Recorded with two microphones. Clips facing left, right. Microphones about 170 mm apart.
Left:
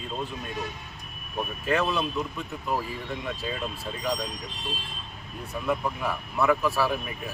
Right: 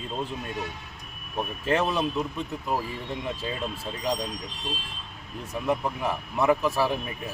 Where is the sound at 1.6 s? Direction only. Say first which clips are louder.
Right 1 dB; 25° right (ahead or behind).